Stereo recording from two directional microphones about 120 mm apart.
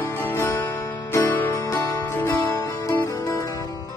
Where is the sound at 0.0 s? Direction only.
20° left (ahead or behind).